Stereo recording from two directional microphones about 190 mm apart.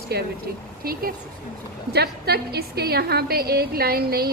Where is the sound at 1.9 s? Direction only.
55° right (ahead or behind).